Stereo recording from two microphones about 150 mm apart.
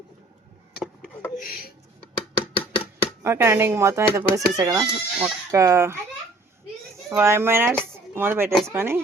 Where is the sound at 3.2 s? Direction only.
15° right (ahead or behind).